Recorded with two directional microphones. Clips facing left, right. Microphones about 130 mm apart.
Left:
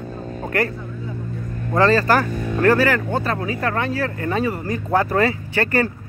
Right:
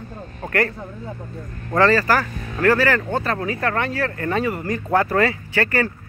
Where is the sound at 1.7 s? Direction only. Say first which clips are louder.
Left 1 dB; 20° left (ahead or behind).